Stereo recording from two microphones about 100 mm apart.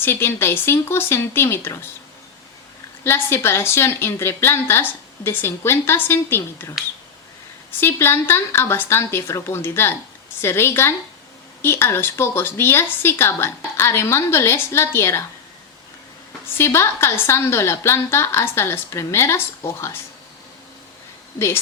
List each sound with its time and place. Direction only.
0.0 s speech: 25° left (ahead or behind)
3.0 s speech: 25° left (ahead or behind)
7.8 s speech: 25° left (ahead or behind)
16.6 s speech: 30° left (ahead or behind)
21.3 s speech: 25° left (ahead or behind)